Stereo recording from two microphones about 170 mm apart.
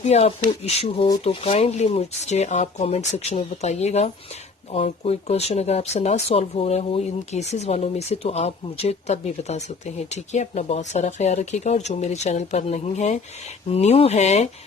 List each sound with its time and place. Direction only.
0.0 s speech: 40° left (ahead or behind)